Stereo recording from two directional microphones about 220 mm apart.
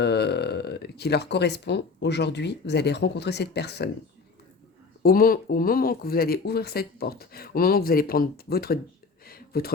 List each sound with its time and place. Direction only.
0.0 s speech: 50° left (ahead or behind)
5.0 s speech: 40° left (ahead or behind)
9.2 s a sound: 45° left (ahead or behind)